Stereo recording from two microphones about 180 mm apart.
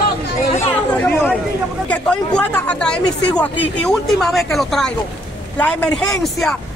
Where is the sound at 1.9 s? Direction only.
5° left (ahead or behind).